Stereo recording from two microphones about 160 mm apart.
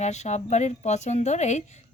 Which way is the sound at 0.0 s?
45° left (ahead or behind).